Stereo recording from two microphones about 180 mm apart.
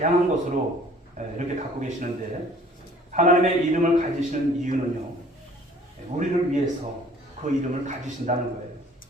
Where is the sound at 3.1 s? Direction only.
45° right (ahead or behind).